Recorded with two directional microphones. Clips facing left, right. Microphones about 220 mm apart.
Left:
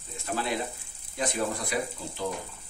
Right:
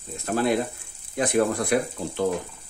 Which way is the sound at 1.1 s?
65° right (ahead or behind).